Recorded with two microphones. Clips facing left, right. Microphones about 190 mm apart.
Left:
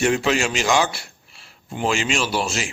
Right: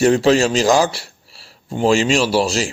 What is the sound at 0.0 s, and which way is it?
A man's voice, 35° right (ahead or behind).